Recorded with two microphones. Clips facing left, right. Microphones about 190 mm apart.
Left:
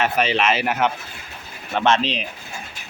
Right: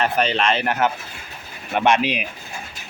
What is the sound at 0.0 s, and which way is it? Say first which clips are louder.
Speech: even; 5° left (ahead or behind).